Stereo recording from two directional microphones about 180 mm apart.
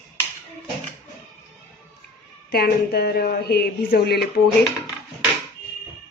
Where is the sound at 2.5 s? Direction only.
60° left (ahead or behind).